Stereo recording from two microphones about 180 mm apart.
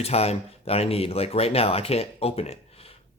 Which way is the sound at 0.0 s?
35° left (ahead or behind).